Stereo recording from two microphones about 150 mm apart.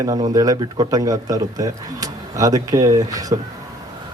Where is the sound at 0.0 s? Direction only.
25° right (ahead or behind).